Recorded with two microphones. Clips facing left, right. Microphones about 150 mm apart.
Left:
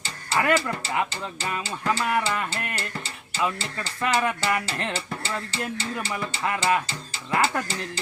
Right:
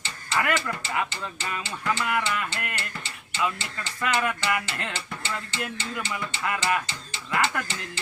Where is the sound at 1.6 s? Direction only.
35° left (ahead or behind).